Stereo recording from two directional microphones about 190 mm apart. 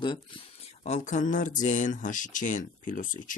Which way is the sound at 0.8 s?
40° left (ahead or behind).